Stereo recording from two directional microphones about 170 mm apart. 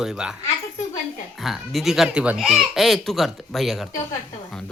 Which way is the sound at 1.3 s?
Centre (ahead or behind).